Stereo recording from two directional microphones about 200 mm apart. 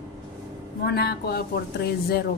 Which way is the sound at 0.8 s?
50° left (ahead or behind).